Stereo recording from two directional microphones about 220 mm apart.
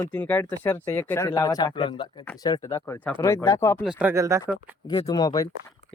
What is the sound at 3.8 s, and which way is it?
Speech, 10° right (ahead or behind).